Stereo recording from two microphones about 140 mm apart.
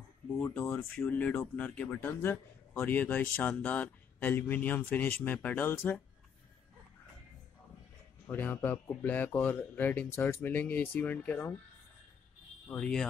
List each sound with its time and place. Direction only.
0.4 s a man's voice: 15° left (ahead or behind)
0.9 s a man's voice: 5° left (ahead or behind)
8.3 s a man's voice: 15° left (ahead or behind)
12.6 s speech: 5° left (ahead or behind)